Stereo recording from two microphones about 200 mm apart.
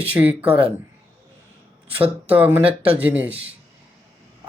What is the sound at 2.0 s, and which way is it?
Speech, 10° right (ahead or behind).